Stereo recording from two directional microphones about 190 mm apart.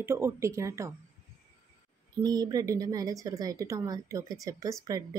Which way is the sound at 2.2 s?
20° right (ahead or behind).